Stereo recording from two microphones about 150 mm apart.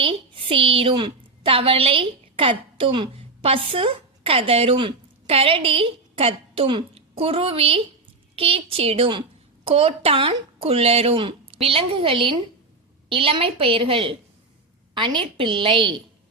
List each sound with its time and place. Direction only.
0.0 s a woman's voice: 35° right (ahead or behind)